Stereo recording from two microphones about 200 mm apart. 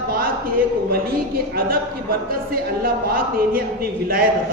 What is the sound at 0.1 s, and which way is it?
A woman's voice, 45° right (ahead or behind).